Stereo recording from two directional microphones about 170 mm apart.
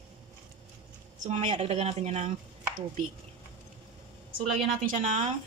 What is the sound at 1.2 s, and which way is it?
Speech, 40° right (ahead or behind).